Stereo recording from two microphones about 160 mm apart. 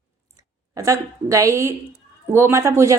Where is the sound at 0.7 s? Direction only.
20° right (ahead or behind).